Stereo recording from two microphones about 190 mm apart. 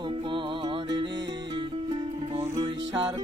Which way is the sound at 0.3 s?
25° right (ahead or behind).